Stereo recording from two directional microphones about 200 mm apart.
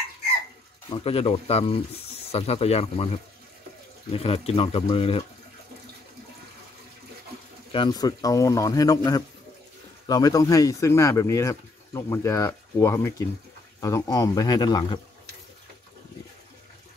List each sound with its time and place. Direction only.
0.8 s speech: 25° left (ahead or behind)
7.7 s speech: 20° left (ahead or behind)